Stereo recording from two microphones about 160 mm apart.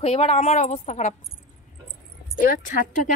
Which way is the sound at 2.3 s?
60° left (ahead or behind).